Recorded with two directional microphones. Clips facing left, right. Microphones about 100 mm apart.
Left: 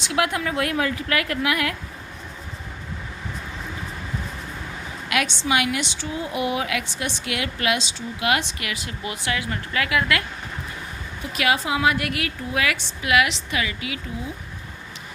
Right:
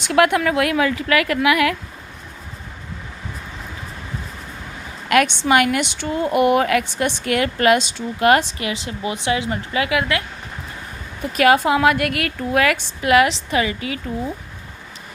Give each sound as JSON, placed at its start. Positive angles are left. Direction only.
{"t": 0.0, "sound": "a woman's voice", "side_deg": -55}
{"t": 5.0, "sound": "a woman's voice", "side_deg": -50}
{"t": 11.2, "sound": "a woman's voice", "side_deg": -45}